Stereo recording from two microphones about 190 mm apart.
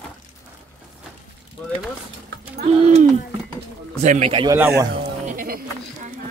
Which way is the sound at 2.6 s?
40° right (ahead or behind).